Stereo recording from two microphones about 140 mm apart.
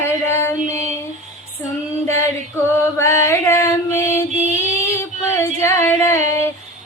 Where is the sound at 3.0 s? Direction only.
20° left (ahead or behind).